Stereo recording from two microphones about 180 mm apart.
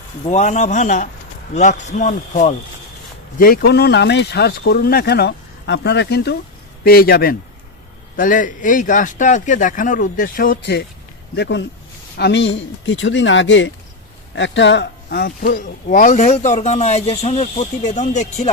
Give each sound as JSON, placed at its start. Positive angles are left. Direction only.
{"t": 0.3, "sound": "a man's voice", "side_deg": 40}
{"t": 3.3, "sound": "speech", "side_deg": 55}
{"t": 11.3, "sound": "speech", "side_deg": 75}
{"t": 15.4, "sound": "a man's voice", "side_deg": 50}